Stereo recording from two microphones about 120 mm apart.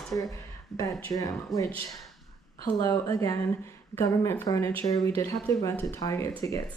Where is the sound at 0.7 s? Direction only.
30° left (ahead or behind).